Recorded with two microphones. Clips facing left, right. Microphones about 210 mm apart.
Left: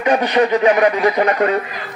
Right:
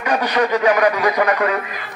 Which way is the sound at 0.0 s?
25° left (ahead or behind).